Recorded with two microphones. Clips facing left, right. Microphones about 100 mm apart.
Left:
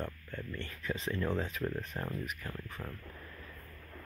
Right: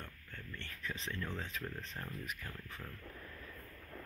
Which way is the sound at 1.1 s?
40° left (ahead or behind).